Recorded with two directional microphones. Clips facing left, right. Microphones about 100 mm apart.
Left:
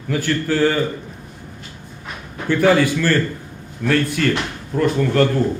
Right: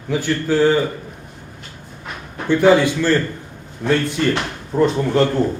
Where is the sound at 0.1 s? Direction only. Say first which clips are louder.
Right 1 dB; 15° right (ahead or behind).